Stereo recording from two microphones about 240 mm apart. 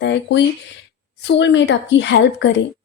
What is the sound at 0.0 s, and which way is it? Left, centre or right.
Speech, left.